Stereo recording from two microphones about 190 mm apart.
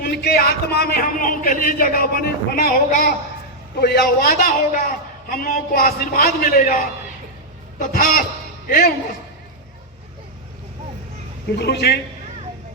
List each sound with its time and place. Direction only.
0.0 s speech: 55° left (ahead or behind)
7.8 s a man's voice: 50° left (ahead or behind)
11.5 s speech: 60° left (ahead or behind)